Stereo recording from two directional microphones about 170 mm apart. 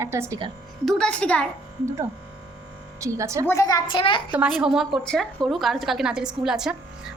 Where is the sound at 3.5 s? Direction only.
20° left (ahead or behind).